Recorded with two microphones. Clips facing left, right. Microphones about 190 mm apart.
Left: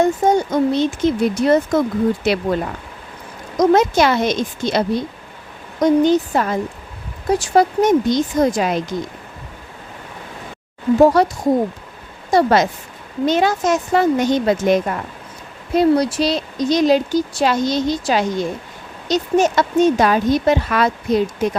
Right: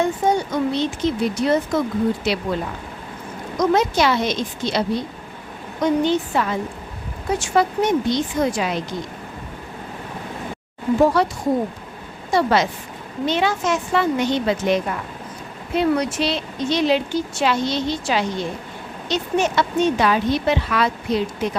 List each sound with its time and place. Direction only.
0.0 s a woman's voice: 45° left (ahead or behind)
3.6 s a woman's voice: 50° left (ahead or behind)
5.8 s a woman's voice: 40° left (ahead or behind)
11.2 s a woman's voice: 40° left (ahead or behind)